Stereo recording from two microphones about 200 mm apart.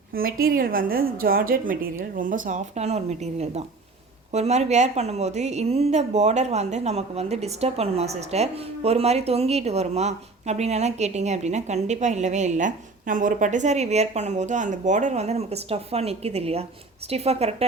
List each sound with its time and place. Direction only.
0.1 s a woman's voice: 45° right (ahead or behind); by 17.5 s 30° right (ahead or behind)